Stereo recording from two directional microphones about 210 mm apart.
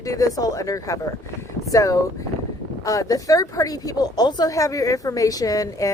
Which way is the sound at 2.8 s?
15° left (ahead or behind).